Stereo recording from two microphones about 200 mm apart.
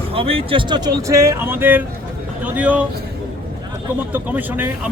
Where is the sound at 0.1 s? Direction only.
30° right (ahead or behind); by 2.8 s 5° right (ahead or behind).